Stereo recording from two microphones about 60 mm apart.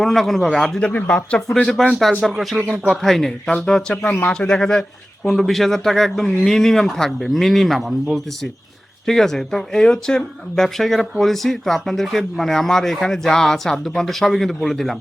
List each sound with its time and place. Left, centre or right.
0.0 s speech: centre
0.8 s speech: centre
2.0 s speech: centre
9.0 s speech: centre